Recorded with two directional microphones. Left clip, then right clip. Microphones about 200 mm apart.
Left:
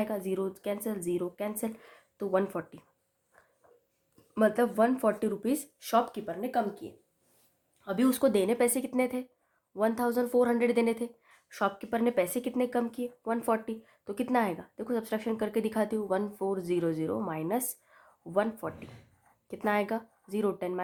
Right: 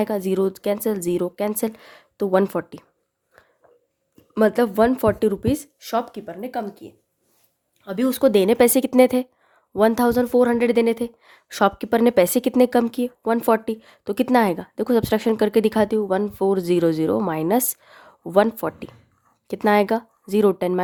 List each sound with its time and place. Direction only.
0.0 s a woman's voice: 45° right (ahead or behind)
3.3 s a sound: 35° right (ahead or behind)
4.1 s a woman's voice: 40° right (ahead or behind)